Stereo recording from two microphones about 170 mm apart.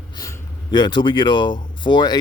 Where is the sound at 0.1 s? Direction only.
20° left (ahead or behind).